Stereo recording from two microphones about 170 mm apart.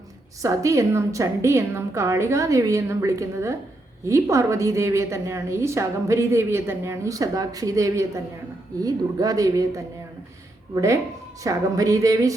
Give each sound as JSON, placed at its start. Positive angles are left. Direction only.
{"t": 0.4, "sound": "a woman's voice", "side_deg": -20}
{"t": 11.4, "sound": "speech", "side_deg": -20}